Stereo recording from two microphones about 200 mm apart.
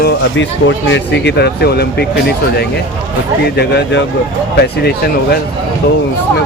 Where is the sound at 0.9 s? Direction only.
60° left (ahead or behind).